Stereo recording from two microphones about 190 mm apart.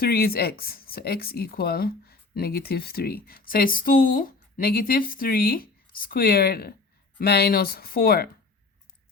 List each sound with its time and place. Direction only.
0.0 s speech: 55° left (ahead or behind)